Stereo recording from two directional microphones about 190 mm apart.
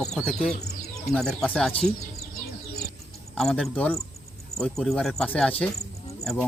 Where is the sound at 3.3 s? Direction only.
Centre (ahead or behind).